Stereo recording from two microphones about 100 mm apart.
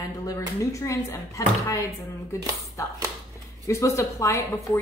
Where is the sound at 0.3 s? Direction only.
30° left (ahead or behind).